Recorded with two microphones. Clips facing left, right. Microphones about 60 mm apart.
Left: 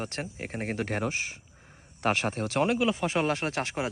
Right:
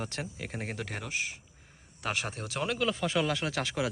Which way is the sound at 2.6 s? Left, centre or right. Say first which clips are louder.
Even; left.